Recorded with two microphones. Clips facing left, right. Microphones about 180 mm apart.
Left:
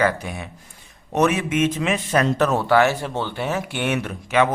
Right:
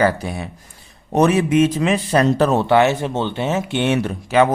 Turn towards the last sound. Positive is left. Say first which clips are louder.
# right 4 dB
turn(degrees=-35)  # may be behind; listen again after turning